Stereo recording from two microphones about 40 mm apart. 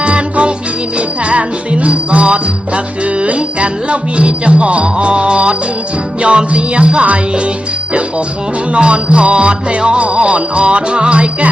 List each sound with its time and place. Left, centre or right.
0.0 s music: right
8.7 s music: right